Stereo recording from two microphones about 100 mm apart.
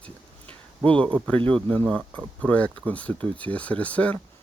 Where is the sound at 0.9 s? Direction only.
10° left (ahead or behind).